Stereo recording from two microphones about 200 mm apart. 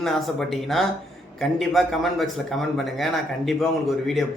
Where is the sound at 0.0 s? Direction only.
Centre (ahead or behind).